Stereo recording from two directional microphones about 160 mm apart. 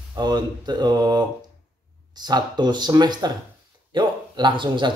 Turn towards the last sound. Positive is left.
turn(degrees=-30)  # may be behind; listen again after turning